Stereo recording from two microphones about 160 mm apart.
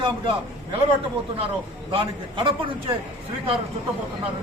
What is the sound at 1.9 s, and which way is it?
Speech, 35° right (ahead or behind).